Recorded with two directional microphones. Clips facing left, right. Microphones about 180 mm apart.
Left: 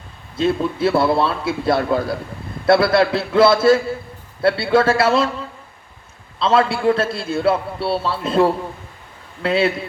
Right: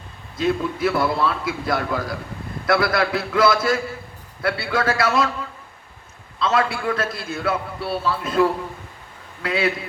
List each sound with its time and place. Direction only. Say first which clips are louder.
0.3 s a man's voice: left 3 dB; 30° left (ahead or behind)
6.4 s a man's voice: left 5 dB; 30° left (ahead or behind)